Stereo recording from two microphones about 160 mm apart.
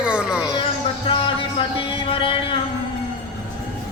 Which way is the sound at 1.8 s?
35° left (ahead or behind).